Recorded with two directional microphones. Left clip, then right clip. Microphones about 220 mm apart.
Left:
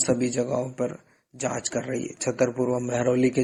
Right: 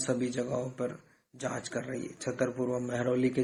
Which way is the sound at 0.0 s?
35° left (ahead or behind).